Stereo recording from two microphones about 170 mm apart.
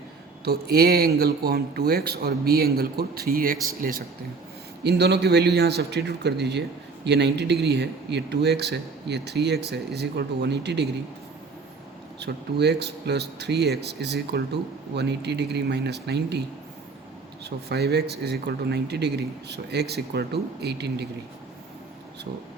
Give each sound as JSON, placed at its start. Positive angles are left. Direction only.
{"t": 0.4, "sound": "speech", "side_deg": -65}
{"t": 4.8, "sound": "speech", "side_deg": -75}
{"t": 12.2, "sound": "speech", "side_deg": -80}
{"t": 17.4, "sound": "speech", "side_deg": -75}